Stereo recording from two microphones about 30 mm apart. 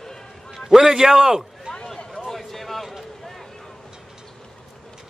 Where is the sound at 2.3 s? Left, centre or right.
Centre.